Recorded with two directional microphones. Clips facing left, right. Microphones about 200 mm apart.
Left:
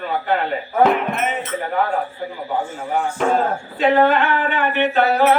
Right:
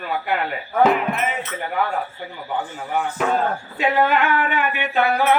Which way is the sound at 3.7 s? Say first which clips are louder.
Left 4 dB; 10° right (ahead or behind).